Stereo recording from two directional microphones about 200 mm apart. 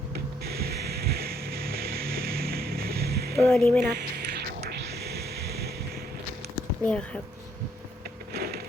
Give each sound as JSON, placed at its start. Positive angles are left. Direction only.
{"t": 0.1, "sound": "music", "side_deg": -50}
{"t": 3.3, "sound": "speech", "side_deg": 5}
{"t": 4.4, "sound": "music", "side_deg": -50}
{"t": 6.8, "sound": "speech", "side_deg": 5}
{"t": 8.3, "sound": "a sound", "side_deg": -50}